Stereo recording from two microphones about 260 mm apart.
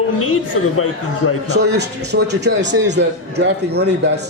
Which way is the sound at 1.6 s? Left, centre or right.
Right.